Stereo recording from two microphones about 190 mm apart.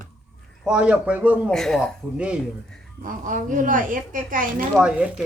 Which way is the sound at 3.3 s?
45° right (ahead or behind).